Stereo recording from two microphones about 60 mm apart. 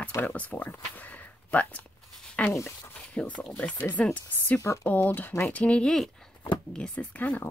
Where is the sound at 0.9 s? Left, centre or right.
Left.